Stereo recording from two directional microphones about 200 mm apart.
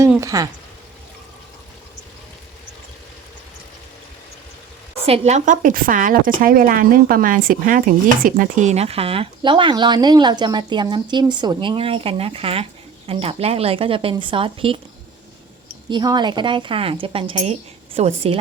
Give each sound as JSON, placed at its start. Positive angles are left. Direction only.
{"t": 0.2, "sound": "speech", "side_deg": -15}
{"t": 5.0, "sound": "a woman's voice", "side_deg": -30}
{"t": 15.9, "sound": "a woman's voice", "side_deg": -20}